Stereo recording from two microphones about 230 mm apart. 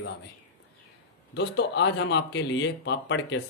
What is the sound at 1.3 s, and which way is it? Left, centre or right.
Speech, left.